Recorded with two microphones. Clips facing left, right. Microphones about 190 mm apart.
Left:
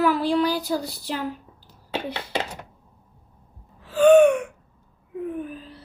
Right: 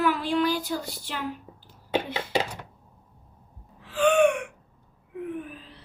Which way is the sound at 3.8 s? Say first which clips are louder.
Left 7 dB; 40° left (ahead or behind).